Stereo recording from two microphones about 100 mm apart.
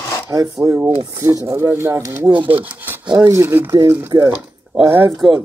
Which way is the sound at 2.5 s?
20° right (ahead or behind).